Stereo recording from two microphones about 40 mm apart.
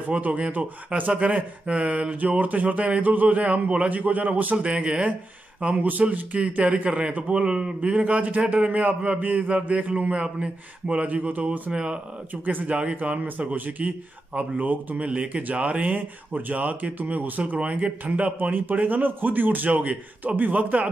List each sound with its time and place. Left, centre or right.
0.1 s speech: right
4.6 s a man's voice: right
11.1 s speech: right
11.7 s a man's voice: right
15.0 s speech: right
17.6 s speech: right
18.4 s speech: right
19.7 s speech: right